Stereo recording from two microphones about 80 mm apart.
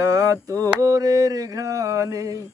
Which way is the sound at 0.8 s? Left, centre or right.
Right.